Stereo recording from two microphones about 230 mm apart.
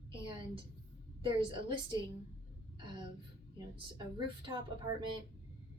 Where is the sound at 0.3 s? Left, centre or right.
Right.